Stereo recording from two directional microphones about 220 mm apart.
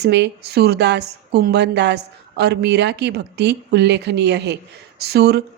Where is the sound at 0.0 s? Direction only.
50° right (ahead or behind).